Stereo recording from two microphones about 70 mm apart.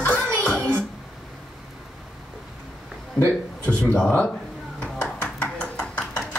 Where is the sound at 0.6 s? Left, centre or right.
Right.